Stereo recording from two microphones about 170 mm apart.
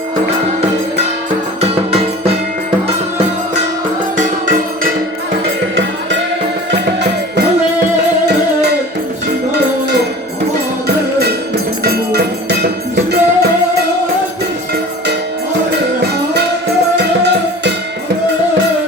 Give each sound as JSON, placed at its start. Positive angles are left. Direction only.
{"t": 1.6, "sound": "music", "side_deg": -35}
{"t": 4.2, "sound": "music", "side_deg": -55}
{"t": 10.8, "sound": "music", "side_deg": -70}
{"t": 17.0, "sound": "music", "side_deg": -85}